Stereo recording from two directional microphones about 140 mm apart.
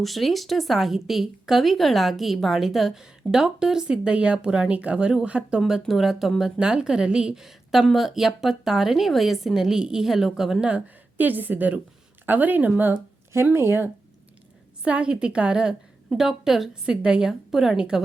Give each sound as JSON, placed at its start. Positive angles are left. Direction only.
{"t": 0.0, "sound": "a woman's voice", "side_deg": 0}